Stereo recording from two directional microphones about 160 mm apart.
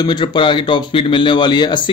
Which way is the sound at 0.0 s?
30° left (ahead or behind).